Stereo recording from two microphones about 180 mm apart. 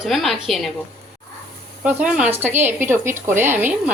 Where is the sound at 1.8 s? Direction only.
5° right (ahead or behind).